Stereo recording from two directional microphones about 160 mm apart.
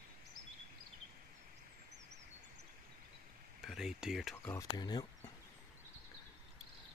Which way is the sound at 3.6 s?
Centre (ahead or behind).